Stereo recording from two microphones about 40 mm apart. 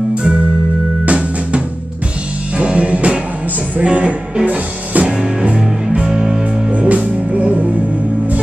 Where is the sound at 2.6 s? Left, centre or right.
Right.